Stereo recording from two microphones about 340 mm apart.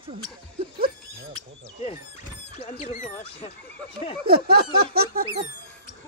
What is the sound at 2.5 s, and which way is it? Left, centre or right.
Speech, centre.